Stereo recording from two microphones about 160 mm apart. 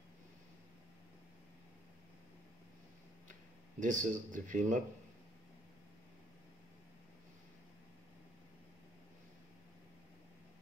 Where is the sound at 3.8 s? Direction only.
55° right (ahead or behind).